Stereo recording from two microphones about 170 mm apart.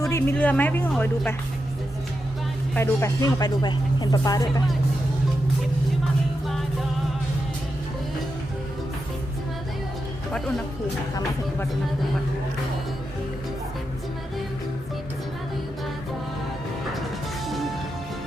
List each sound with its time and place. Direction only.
0.1 s speech: 10° left (ahead or behind)
2.7 s speech: 15° left (ahead or behind)
17.4 s music: centre (ahead or behind)